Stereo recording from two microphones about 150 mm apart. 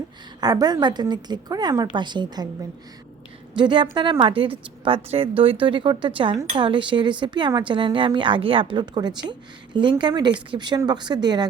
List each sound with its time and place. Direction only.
0.3 s a woman's voice: 25° right (ahead or behind)
3.5 s a woman's voice: 30° right (ahead or behind)